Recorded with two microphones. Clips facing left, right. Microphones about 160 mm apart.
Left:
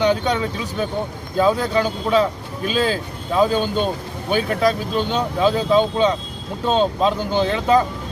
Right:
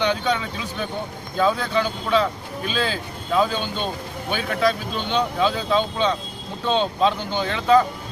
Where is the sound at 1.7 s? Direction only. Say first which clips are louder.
Left 3 dB; 40° left (ahead or behind).